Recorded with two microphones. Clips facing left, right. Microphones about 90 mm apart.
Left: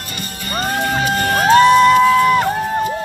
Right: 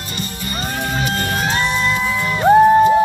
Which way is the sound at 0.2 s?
45° left (ahead or behind).